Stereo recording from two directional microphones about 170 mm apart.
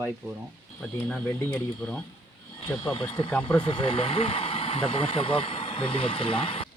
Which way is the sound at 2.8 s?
30° left (ahead or behind).